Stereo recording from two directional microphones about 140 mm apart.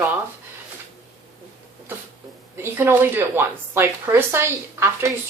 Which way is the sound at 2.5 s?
15° right (ahead or behind).